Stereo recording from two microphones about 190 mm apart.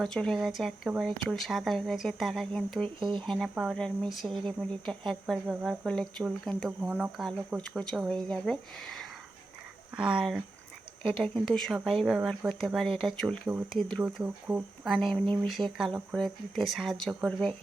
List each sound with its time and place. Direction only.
0.0 s speech: 5° left (ahead or behind)
3.0 s speech: 25° right (ahead or behind)
3.2 s speech: centre (ahead or behind)
14.8 s speech: 5° left (ahead or behind)